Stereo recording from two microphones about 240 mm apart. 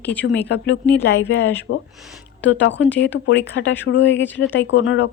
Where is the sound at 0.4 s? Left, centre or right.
Left.